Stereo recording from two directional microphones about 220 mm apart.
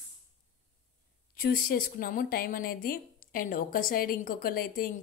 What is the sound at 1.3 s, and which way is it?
A woman's voice, 40° left (ahead or behind).